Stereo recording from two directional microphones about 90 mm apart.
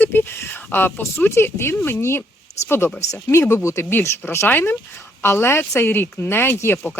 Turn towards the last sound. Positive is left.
turn(degrees=25)  # may be behind; listen again after turning